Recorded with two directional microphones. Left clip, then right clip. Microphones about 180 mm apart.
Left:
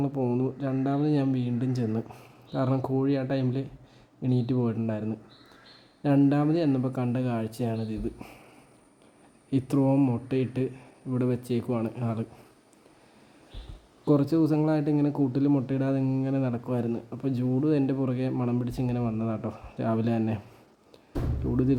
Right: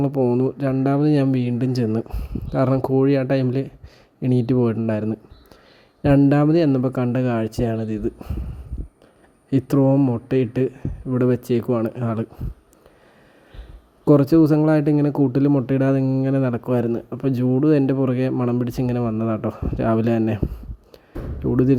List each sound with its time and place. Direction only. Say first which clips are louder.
0.0 s speech: right 9 dB; 40° right (ahead or behind)
9.5 s speech: right 7 dB; 35° right (ahead or behind)
14.0 s speech: right 9 dB; 40° right (ahead or behind)
21.4 s speech: right 9 dB; 40° right (ahead or behind)